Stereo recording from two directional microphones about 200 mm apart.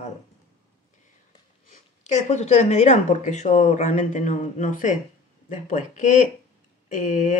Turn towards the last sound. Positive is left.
turn(degrees=40)  # may be behind; listen again after turning